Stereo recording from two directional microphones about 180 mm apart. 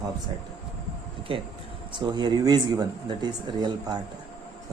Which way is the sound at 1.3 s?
30° right (ahead or behind).